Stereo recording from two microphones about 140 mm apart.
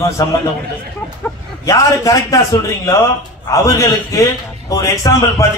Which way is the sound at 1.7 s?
25° left (ahead or behind).